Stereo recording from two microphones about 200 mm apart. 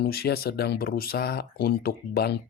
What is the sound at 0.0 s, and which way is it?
Speech, 50° left (ahead or behind).